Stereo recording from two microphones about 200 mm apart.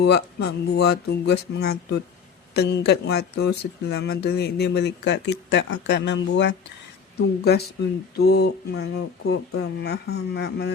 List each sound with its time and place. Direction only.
0.0 s speech: 55° left (ahead or behind)
8.1 s speech: 55° left (ahead or behind)